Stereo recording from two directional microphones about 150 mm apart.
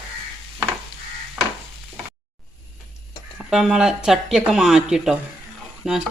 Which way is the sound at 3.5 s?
5° right (ahead or behind).